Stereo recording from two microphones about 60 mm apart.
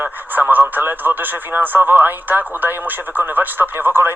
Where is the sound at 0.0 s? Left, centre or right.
Right.